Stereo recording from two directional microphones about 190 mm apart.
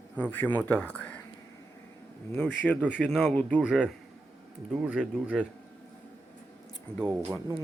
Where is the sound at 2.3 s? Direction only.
5° left (ahead or behind).